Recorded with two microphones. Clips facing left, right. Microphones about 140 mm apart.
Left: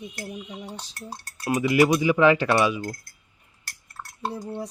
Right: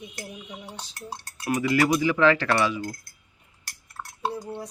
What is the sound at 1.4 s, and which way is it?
Speech, 20° left (ahead or behind).